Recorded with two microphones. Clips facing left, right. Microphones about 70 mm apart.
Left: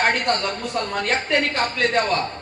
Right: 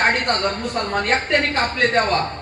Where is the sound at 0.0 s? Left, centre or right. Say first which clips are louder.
Right 2 dB; right.